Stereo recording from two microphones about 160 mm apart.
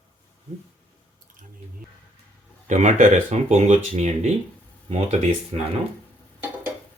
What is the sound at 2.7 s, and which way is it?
Speech, 45° right (ahead or behind).